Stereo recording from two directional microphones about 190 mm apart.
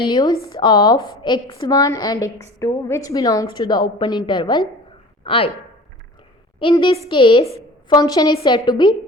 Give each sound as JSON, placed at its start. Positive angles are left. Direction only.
{"t": 0.0, "sound": "a woman's voice", "side_deg": 20}
{"t": 6.6, "sound": "a woman's voice", "side_deg": 25}